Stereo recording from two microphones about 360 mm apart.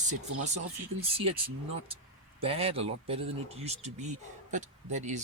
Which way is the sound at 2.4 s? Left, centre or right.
Centre.